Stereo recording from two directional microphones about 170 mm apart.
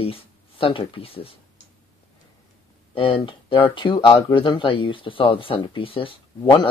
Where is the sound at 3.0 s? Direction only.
30° left (ahead or behind).